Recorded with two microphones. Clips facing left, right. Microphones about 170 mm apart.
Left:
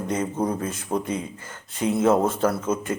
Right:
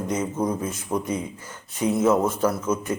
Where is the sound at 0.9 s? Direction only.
35° left (ahead or behind).